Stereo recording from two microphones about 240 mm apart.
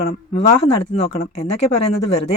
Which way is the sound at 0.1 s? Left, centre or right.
Left.